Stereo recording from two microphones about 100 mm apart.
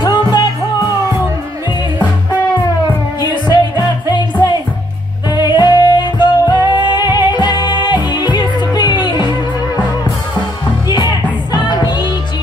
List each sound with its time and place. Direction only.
0.0 s music: 50° left (ahead or behind)
3.5 s music: 45° left (ahead or behind)
5.3 s music: 45° left (ahead or behind)
10.9 s music: 45° left (ahead or behind)